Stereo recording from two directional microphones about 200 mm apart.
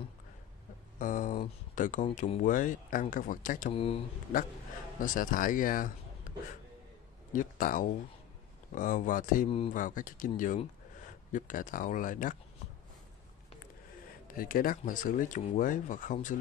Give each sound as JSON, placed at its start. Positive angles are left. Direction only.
{"t": 0.9, "sound": "speech", "side_deg": 40}
{"t": 3.7, "sound": "speech", "side_deg": 30}
{"t": 5.0, "sound": "a man's voice", "side_deg": 40}
{"t": 7.3, "sound": "speech", "side_deg": 40}
{"t": 14.2, "sound": "speech", "side_deg": 45}